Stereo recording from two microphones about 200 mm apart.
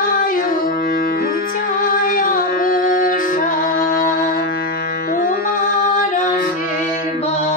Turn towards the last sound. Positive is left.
turn(degrees=45)  # may be behind; listen again after turning